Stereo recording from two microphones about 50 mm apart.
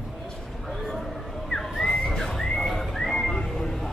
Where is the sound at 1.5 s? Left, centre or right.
Centre.